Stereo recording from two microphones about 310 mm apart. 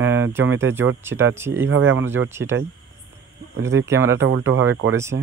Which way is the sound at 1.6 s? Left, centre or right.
Right.